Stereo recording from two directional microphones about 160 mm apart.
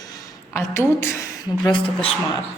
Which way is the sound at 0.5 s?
15° left (ahead or behind).